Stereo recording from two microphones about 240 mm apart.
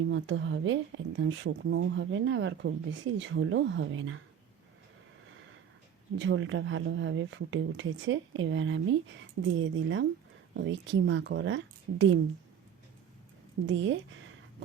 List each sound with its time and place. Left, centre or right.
0.1 s speech: right
6.1 s speech: right
13.7 s speech: right